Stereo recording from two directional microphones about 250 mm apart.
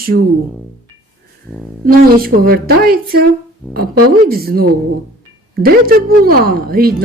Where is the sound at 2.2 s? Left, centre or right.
Right.